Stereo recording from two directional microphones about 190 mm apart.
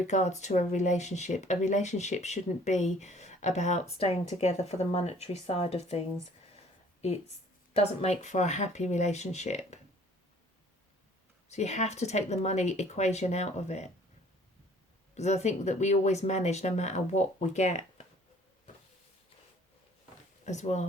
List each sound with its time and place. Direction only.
0.1 s speech: 40° left (ahead or behind)
7.8 s speech: 35° left (ahead or behind)
11.4 s speech: 35° left (ahead or behind)
15.1 s speech: 35° left (ahead or behind)
20.4 s speech: 40° left (ahead or behind)